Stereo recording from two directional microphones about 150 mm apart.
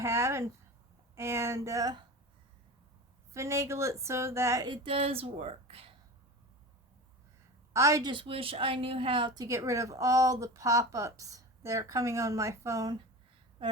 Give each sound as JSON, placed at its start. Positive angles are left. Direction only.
{"t": 0.0, "sound": "a woman's voice", "side_deg": -20}
{"t": 3.3, "sound": "a woman's voice", "side_deg": -20}
{"t": 7.7, "sound": "a woman's voice", "side_deg": -20}
{"t": 8.1, "sound": "a woman's voice", "side_deg": -35}